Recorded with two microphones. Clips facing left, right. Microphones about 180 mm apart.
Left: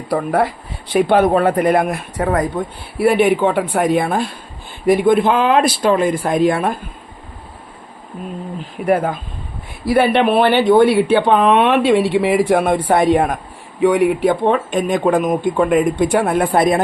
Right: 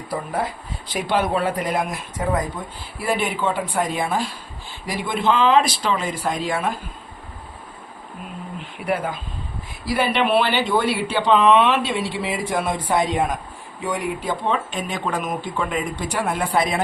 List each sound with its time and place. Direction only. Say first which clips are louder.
0.1 s speech: left 9 dB; 70° left (ahead or behind)
8.5 s speech: left 8 dB; 45° left (ahead or behind)